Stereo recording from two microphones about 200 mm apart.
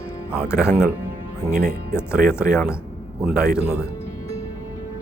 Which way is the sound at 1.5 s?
50° right (ahead or behind).